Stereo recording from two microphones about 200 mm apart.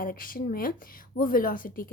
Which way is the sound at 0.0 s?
45° left (ahead or behind).